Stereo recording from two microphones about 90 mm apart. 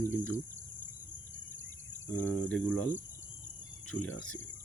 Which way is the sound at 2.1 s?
20° left (ahead or behind).